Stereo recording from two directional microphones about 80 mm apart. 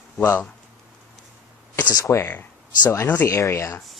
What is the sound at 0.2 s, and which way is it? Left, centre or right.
Speech, left.